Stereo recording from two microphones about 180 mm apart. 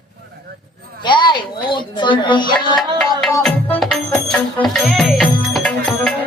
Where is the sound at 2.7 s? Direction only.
5° left (ahead or behind).